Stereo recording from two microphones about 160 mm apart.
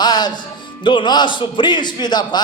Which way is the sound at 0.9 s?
30° left (ahead or behind).